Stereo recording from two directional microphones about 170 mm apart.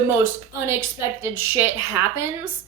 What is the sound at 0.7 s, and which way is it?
A woman's voice, 15° right (ahead or behind).